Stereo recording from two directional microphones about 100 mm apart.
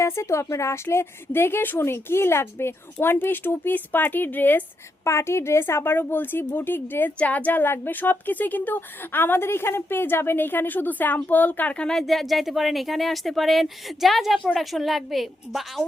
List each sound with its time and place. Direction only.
0.0 s a woman's voice: 30° left (ahead or behind); by 15.8 s centre (ahead or behind)